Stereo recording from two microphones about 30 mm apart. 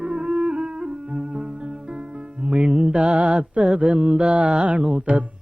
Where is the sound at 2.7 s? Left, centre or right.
Right.